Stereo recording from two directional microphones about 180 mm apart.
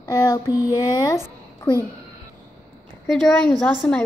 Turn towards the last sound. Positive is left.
turn(degrees=5)  # may be behind; listen again after turning